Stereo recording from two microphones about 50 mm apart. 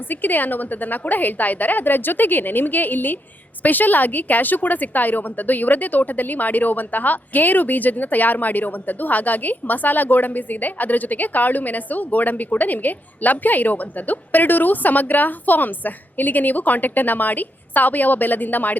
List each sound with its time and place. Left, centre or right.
0.1 s a woman's voice: left